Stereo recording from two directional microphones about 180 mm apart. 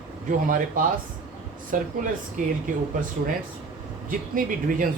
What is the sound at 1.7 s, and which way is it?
Speech, 45° right (ahead or behind).